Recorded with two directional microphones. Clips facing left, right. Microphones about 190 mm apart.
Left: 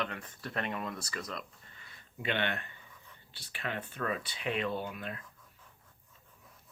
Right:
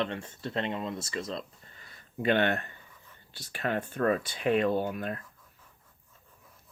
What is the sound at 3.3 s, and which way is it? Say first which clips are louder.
Speech: right 8 dB; 45° right (ahead or behind).